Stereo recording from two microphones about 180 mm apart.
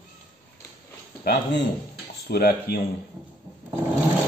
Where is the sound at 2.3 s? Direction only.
60° left (ahead or behind).